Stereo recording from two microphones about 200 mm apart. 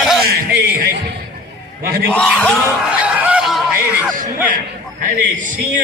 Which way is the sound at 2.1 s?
5° left (ahead or behind).